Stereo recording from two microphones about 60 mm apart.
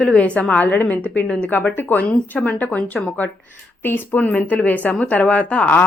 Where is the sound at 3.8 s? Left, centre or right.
Left.